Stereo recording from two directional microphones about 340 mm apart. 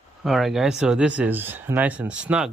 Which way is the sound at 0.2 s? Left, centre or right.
Centre.